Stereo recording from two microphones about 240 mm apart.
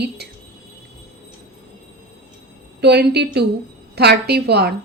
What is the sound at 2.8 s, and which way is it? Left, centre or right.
Speech, right.